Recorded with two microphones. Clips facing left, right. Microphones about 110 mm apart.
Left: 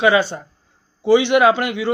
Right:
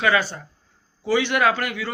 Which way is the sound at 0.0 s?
20° left (ahead or behind).